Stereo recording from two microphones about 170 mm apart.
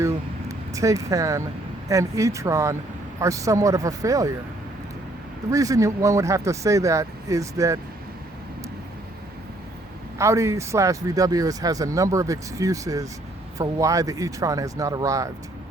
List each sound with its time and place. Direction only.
0.0 s vehicle: 20° right (ahead or behind)
1.9 s speech: 20° right (ahead or behind)
5.5 s speech: 20° right (ahead or behind)
10.2 s speech: 15° right (ahead or behind)